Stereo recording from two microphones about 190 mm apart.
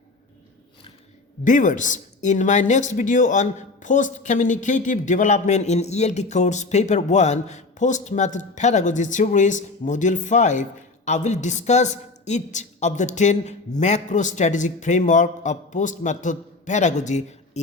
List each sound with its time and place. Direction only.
1.5 s speech: 40° left (ahead or behind)